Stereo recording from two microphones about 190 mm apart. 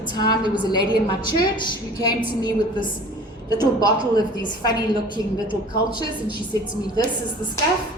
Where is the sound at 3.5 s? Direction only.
20° left (ahead or behind).